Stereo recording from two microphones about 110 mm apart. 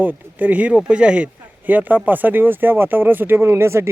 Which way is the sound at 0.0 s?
15° right (ahead or behind).